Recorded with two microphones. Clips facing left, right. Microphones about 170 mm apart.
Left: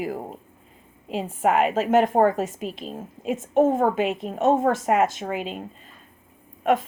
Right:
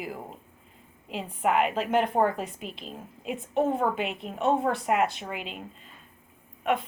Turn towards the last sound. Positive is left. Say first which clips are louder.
# left 6 dB
turn(degrees=40)  # may be behind; listen again after turning